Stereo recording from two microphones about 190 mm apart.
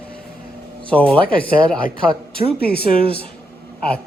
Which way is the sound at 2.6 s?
55° left (ahead or behind).